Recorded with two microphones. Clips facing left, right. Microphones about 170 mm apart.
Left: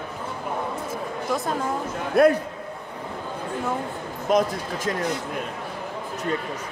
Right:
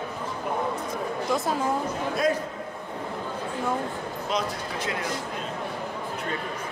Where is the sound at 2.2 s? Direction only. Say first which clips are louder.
Left 9 dB; 60° left (ahead or behind).